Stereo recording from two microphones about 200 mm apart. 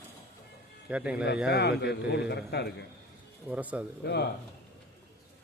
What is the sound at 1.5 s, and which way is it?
Speech, 60° left (ahead or behind).